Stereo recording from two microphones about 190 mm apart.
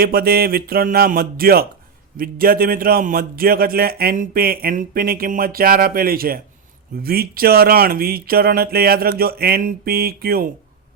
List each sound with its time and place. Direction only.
0.0 s a man's voice: 50° right (ahead or behind)